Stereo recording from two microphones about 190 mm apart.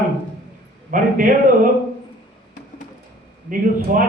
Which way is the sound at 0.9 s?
45° right (ahead or behind).